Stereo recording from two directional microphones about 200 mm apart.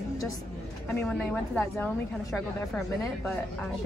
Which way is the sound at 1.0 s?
5° left (ahead or behind).